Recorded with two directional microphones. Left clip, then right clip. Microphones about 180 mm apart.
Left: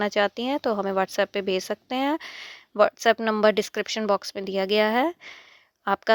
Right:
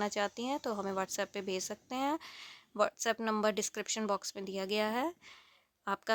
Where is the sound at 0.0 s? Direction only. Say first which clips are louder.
Left 11 dB; 30° left (ahead or behind).